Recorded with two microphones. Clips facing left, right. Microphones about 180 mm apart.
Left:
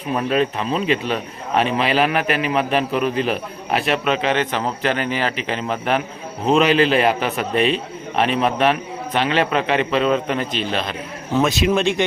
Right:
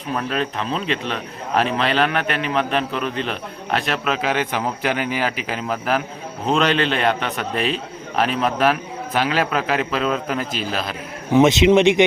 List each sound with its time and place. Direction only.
0.1 s a man's voice: 5° left (ahead or behind)
11.3 s speech: 20° right (ahead or behind)